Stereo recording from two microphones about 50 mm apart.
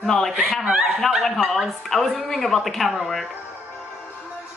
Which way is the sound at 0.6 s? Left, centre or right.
Centre.